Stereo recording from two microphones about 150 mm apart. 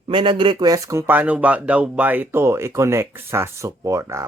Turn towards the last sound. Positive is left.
turn(degrees=-20)  # may be behind; listen again after turning